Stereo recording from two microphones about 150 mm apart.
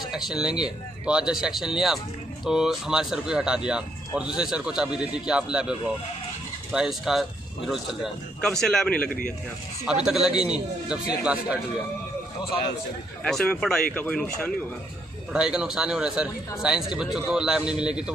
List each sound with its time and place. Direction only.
0.0 s speech: 5° right (ahead or behind)
13.2 s speech: 5° left (ahead or behind)
15.3 s speech: 5° right (ahead or behind)